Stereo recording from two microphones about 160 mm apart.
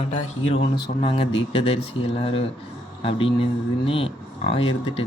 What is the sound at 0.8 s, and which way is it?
Speech, 35° left (ahead or behind).